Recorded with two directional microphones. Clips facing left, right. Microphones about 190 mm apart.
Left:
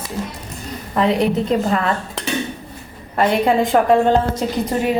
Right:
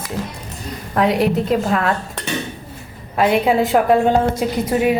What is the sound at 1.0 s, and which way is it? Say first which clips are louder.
Speech: even; 5° right (ahead or behind).